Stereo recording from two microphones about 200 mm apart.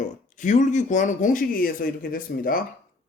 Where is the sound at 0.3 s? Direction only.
40° left (ahead or behind).